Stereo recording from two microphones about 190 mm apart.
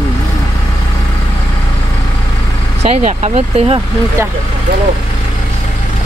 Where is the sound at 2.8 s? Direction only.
35° right (ahead or behind).